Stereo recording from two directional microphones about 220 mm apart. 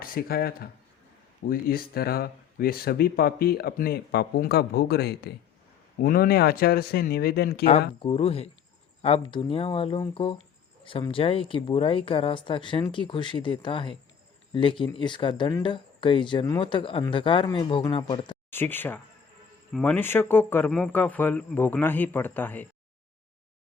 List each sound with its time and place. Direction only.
0.0 s speech: 40° left (ahead or behind)
8.0 s speech: 25° left (ahead or behind)
18.5 s speech: 10° left (ahead or behind)